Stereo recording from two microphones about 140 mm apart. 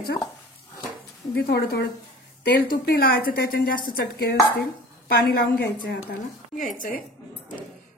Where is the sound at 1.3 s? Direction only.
90° left.